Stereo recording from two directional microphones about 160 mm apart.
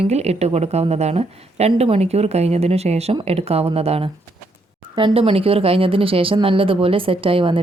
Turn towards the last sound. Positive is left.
turn(degrees=-35)  # may be behind; listen again after turning